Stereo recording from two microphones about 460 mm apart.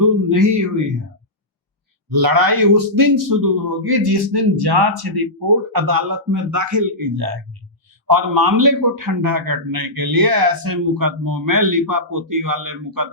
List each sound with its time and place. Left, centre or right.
0.0 s a man's voice: right
2.0 s a man's voice: right